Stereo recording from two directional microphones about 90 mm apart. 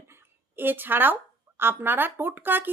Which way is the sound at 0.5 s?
20° right (ahead or behind).